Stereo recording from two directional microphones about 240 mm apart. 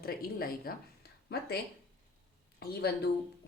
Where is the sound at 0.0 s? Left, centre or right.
Left.